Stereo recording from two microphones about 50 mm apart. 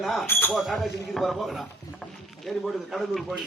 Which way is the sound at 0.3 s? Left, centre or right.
Left.